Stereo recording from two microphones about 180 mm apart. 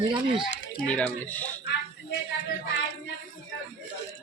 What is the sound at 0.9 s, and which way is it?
Speech, 5° left (ahead or behind).